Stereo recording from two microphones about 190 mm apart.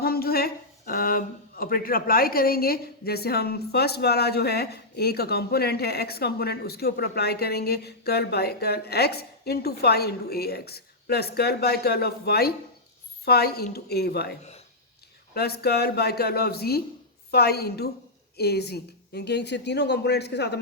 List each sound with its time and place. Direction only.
0.0 s speech: 55° left (ahead or behind)
15.4 s speech: 55° left (ahead or behind)